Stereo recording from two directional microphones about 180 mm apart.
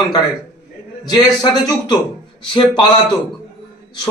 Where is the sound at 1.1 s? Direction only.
20° left (ahead or behind).